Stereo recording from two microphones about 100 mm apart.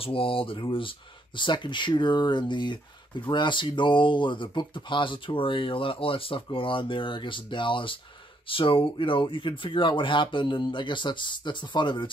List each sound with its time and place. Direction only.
0.0 s speech: 65° left (ahead or behind)